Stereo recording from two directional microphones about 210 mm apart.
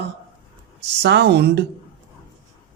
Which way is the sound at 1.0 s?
55° right (ahead or behind).